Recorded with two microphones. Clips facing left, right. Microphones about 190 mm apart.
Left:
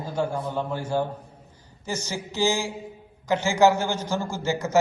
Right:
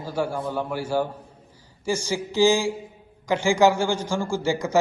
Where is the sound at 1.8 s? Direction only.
15° right (ahead or behind).